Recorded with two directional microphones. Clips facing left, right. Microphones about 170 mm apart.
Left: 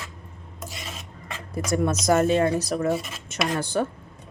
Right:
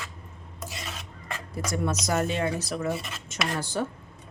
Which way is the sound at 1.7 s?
50° left (ahead or behind).